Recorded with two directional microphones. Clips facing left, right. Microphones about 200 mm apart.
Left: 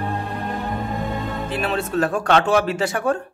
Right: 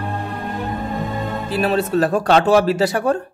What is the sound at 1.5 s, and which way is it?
A man's voice, 35° right (ahead or behind).